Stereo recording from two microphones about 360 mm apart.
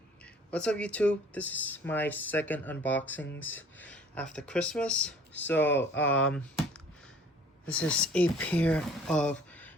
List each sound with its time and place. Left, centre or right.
0.5 s speech: centre
7.7 s speech: centre